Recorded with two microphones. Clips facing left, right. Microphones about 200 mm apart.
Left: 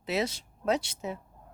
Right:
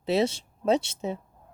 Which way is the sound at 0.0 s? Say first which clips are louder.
Right 6 dB; 30° right (ahead or behind).